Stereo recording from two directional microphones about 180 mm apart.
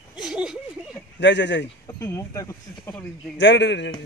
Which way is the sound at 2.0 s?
15° left (ahead or behind).